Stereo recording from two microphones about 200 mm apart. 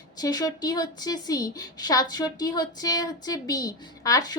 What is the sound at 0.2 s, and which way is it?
A woman's voice, 20° left (ahead or behind).